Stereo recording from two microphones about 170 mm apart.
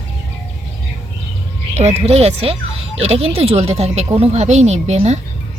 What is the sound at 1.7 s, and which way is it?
Speech, 40° right (ahead or behind).